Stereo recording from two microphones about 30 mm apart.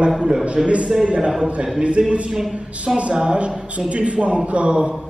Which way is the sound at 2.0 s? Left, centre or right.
Right.